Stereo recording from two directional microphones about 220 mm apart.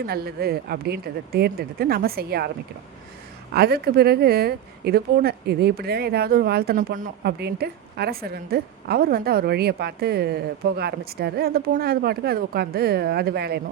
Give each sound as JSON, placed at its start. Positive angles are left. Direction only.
{"t": 0.0, "sound": "speech", "side_deg": -45}
{"t": 3.5, "sound": "speech", "side_deg": -45}